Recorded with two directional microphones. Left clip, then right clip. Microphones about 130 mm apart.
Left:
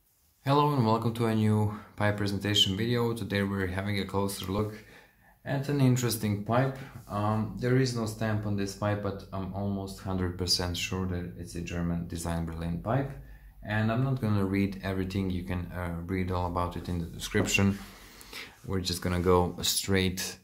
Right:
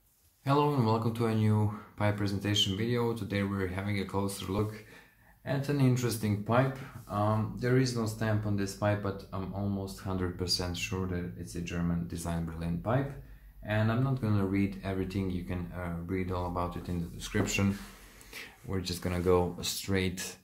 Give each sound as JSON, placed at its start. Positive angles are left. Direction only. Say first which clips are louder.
{"t": 0.5, "sound": "speech", "louder": "left 2 dB", "side_deg": 30}
{"t": 5.4, "sound": "speech", "louder": "left 1 dB", "side_deg": 10}
{"t": 5.8, "sound": "speech", "louder": "left 2 dB", "side_deg": 25}
{"t": 6.4, "sound": "speech", "louder": "even", "side_deg": 10}
{"t": 11.0, "sound": "speech", "louder": "left 1 dB", "side_deg": 15}
{"t": 12.1, "sound": "speech", "louder": "left 3 dB", "side_deg": 30}
{"t": 14.2, "sound": "speech", "louder": "left 2 dB", "side_deg": 35}